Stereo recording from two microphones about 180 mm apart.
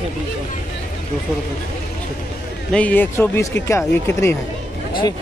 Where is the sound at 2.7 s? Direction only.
10° left (ahead or behind).